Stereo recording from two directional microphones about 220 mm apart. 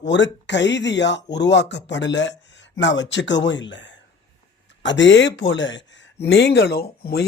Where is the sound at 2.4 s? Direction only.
55° left (ahead or behind).